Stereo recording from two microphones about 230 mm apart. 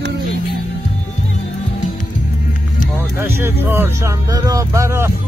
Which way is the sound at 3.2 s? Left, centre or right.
Centre.